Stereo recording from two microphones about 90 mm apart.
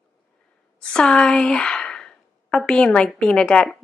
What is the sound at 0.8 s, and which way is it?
Speech, 10° left (ahead or behind).